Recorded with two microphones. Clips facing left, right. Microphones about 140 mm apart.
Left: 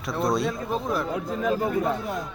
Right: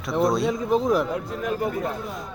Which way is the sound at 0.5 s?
15° right (ahead or behind).